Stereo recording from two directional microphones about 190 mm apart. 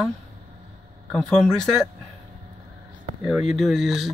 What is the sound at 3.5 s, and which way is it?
Speech, centre (ahead or behind).